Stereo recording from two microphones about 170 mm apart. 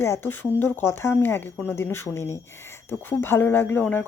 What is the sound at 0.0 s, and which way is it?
Speech, 15° left (ahead or behind).